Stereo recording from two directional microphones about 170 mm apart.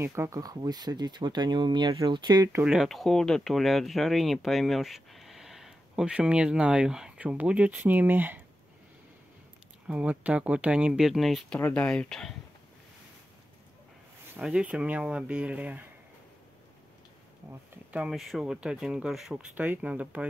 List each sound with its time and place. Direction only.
0.0 s speech: 15° right (ahead or behind)
2.6 s speech: 5° right (ahead or behind)
9.8 s speech: 10° right (ahead or behind)
14.3 s speech: 5° right (ahead or behind)
17.5 s speech: 5° right (ahead or behind)